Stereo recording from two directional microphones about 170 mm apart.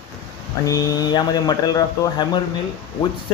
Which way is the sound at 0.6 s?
20° left (ahead or behind).